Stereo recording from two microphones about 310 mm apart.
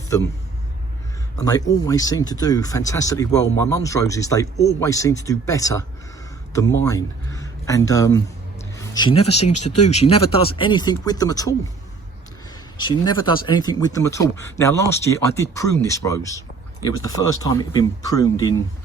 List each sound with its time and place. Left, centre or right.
1.4 s speech: centre
12.7 s speech: centre